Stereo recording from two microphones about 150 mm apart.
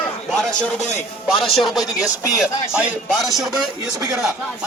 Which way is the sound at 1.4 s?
Centre (ahead or behind).